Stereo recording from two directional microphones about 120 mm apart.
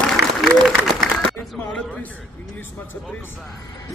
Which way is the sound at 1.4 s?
15° left (ahead or behind).